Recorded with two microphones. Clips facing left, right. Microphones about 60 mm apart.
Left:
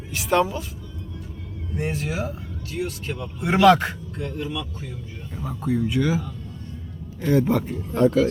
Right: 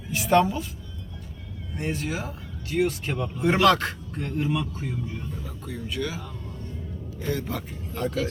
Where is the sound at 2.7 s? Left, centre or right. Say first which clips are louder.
Right 4 dB; right.